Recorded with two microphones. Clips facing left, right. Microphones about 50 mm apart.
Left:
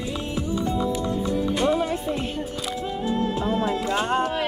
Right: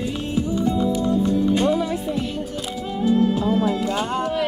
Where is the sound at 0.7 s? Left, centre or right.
Left.